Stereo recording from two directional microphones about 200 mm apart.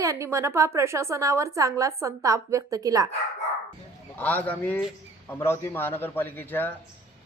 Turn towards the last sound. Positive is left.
turn(degrees=10)  # may be behind; listen again after turning